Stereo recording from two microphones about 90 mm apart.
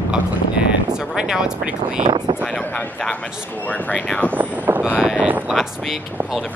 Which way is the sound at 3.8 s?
15° left (ahead or behind).